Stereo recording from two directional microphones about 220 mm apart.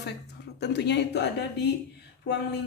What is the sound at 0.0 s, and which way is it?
A woman's voice, 50° left (ahead or behind).